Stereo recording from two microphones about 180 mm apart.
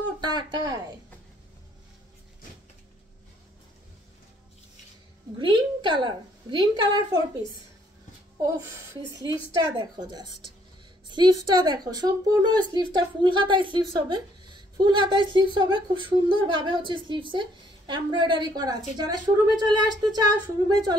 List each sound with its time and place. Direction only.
0.2 s a woman's voice: 25° right (ahead or behind)
5.4 s a woman's voice: 25° right (ahead or behind)
9.2 s a woman's voice: 25° right (ahead or behind)